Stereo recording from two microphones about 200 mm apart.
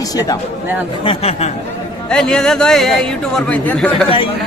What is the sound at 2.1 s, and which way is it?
Speech, 5° left (ahead or behind).